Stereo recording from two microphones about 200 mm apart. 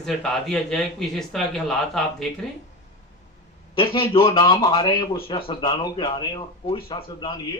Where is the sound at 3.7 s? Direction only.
25° left (ahead or behind).